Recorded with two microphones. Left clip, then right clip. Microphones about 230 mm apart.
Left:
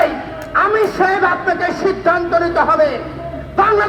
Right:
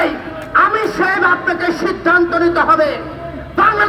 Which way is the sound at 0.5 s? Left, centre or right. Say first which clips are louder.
Right 1 dB; right.